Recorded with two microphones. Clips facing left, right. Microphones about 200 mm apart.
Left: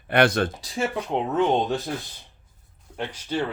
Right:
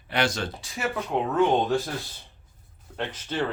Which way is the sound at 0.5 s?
35° left (ahead or behind).